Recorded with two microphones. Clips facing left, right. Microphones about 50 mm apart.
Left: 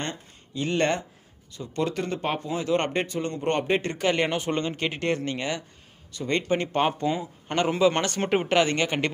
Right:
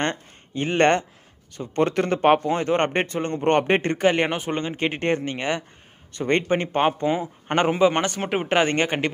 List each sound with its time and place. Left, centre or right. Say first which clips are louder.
0.0 s a sound: right 8 dB; right
0.7 s a man's voice: right 7 dB; right
2.7 s speech: even; right
4.0 s a man's voice: right 4 dB; right
4.8 s a man's voice: right 7 dB; right
6.1 s speech: right 5 dB; right
6.5 s a man's voice: right 3 dB; right
7.7 s a man's voice: even; right
8.2 s speech: left 1 dB; centre
8.5 s a man's voice: right 6 dB; right